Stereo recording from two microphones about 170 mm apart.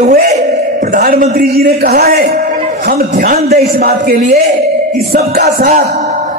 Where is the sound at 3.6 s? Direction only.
65° right (ahead or behind).